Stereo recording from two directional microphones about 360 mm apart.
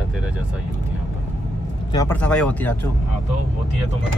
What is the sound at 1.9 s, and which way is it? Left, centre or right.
Speech, centre.